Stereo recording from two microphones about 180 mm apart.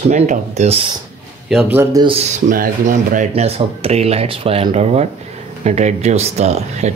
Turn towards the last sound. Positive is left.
turn(degrees=-35)  # may be behind; listen again after turning